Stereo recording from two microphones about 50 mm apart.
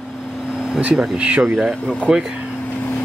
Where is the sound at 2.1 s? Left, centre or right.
Centre.